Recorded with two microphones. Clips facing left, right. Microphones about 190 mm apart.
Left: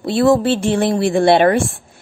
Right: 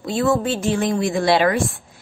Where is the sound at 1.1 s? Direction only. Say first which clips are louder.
Left 6 dB; 30° left (ahead or behind).